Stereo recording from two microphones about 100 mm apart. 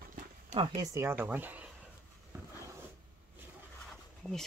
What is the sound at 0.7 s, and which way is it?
Speech, 40° right (ahead or behind).